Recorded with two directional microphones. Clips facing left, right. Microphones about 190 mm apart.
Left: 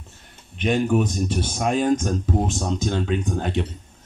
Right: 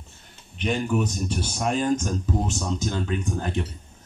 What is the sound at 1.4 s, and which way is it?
Speech, 60° left (ahead or behind).